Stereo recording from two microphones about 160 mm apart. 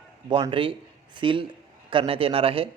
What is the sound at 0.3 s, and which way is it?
Speech, 30° right (ahead or behind).